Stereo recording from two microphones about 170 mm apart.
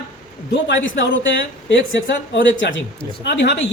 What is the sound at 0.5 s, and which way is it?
Speech, 90° left.